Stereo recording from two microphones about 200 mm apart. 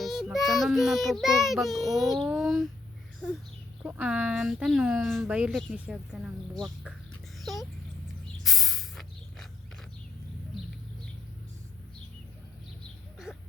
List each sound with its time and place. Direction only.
0.0 s speech: centre (ahead or behind)
3.8 s speech: 10° right (ahead or behind)
7.3 s a sound: centre (ahead or behind)
8.4 s spray: centre (ahead or behind)